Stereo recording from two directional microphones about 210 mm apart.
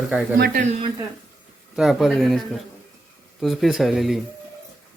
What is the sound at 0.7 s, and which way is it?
Speech, 25° right (ahead or behind).